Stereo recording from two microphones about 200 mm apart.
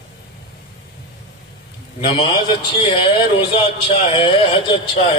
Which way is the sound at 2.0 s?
25° left (ahead or behind).